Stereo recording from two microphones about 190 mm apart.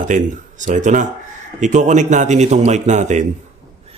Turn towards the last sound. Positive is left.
turn(degrees=-35)  # may be behind; listen again after turning